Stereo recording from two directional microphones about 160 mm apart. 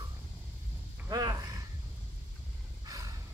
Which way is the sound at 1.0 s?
25° right (ahead or behind).